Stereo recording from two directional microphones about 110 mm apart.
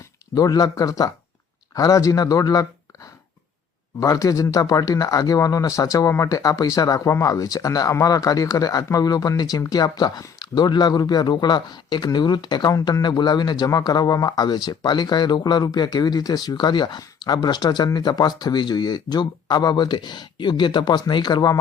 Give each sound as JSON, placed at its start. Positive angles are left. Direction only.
{"t": 0.3, "sound": "speech", "side_deg": 35}
{"t": 4.0, "sound": "speech", "side_deg": 30}